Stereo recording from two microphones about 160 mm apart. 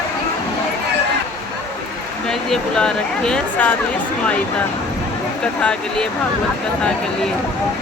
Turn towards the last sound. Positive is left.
turn(degrees=5)  # may be behind; listen again after turning